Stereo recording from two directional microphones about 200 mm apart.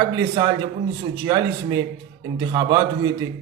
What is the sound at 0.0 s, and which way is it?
Speech, 25° right (ahead or behind).